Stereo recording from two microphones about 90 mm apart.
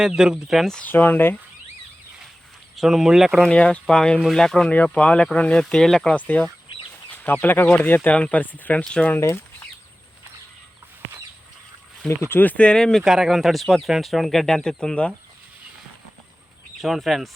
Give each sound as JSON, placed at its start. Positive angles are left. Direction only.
{"t": 0.0, "sound": "speech", "side_deg": -10}
{"t": 0.9, "sound": "speech", "side_deg": 20}
{"t": 2.7, "sound": "speech", "side_deg": -5}
{"t": 3.5, "sound": "speech", "side_deg": 10}
{"t": 9.1, "sound": "speech", "side_deg": 25}
{"t": 12.0, "sound": "speech", "side_deg": 25}
{"t": 13.0, "sound": "speech", "side_deg": -5}
{"t": 16.8, "sound": "speech", "side_deg": 0}